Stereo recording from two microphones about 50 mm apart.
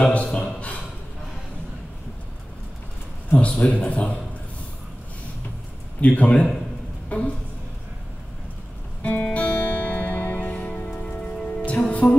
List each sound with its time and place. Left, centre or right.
0.1 s speech: left
3.3 s a man's voice: left
5.9 s a man's voice: left
9.0 s music: left
11.1 s music: centre